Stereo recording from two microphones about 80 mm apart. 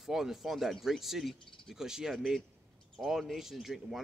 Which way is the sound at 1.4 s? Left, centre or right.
Left.